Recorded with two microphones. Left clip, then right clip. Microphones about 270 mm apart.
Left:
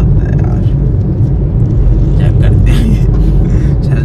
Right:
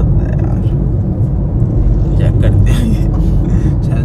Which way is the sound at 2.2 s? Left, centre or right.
Centre.